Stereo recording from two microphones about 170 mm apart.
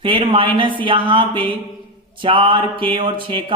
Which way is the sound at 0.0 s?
30° right (ahead or behind).